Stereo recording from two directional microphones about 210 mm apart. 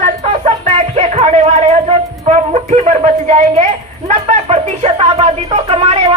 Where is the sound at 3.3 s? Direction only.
30° right (ahead or behind).